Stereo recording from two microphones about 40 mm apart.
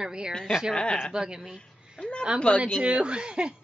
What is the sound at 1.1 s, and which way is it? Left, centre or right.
Speech, centre.